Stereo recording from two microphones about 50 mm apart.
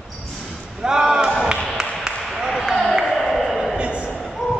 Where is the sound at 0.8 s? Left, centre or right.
Centre.